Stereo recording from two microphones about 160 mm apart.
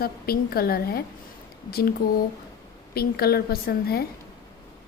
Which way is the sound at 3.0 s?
75° left (ahead or behind).